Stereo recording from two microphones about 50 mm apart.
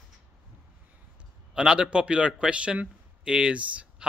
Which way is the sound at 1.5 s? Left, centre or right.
Centre.